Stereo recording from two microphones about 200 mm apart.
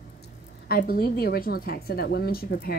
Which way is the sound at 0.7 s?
50° left (ahead or behind).